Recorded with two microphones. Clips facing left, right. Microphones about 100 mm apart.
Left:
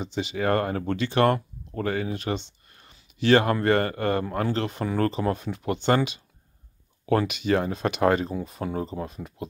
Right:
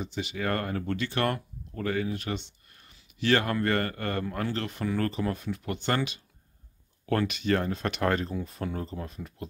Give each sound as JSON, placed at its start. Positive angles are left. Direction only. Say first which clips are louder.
{"t": 0.0, "sound": "speech", "louder": "left 5 dB", "side_deg": 25}